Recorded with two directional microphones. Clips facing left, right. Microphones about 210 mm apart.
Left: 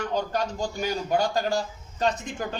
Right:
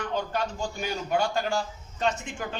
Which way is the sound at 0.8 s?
40° left (ahead or behind).